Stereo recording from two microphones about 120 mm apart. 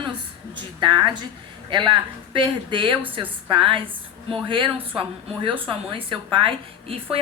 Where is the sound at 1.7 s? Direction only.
40° right (ahead or behind).